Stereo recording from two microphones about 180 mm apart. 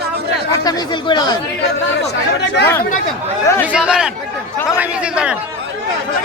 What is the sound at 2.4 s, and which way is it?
Speech, 70° left (ahead or behind).